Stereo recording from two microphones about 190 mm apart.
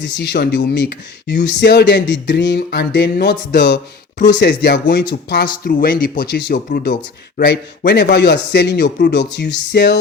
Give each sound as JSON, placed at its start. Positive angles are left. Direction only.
{"t": 0.0, "sound": "speech", "side_deg": 65}